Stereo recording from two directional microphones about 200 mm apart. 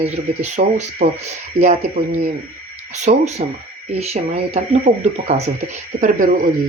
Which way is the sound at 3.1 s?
35° right (ahead or behind).